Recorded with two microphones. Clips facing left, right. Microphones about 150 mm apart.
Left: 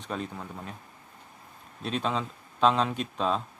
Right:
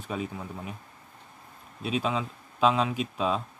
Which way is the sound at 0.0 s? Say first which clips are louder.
Right 1 dB; 5° right (ahead or behind).